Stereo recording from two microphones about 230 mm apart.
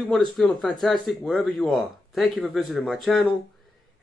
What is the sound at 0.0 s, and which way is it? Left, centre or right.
Speech, centre.